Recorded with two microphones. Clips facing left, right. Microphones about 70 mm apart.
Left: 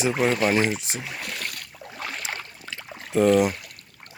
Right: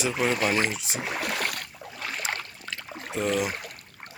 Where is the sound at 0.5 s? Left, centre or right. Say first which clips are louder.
Left 4 dB; centre.